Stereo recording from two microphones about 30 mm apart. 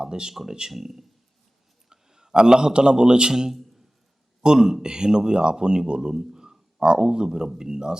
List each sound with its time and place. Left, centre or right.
0.0 s speech: right
0.7 s speech: centre
1.9 s a man's voice: centre
5.9 s a sound: right
7.0 s speech: right